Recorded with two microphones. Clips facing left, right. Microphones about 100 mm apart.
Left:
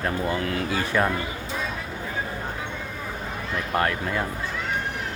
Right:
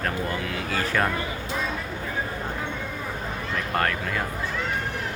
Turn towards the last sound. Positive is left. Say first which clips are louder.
# left 1 dB
turn(degrees=20)  # may be behind; listen again after turning